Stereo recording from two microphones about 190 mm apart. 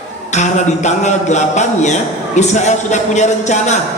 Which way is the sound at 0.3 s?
40° left (ahead or behind).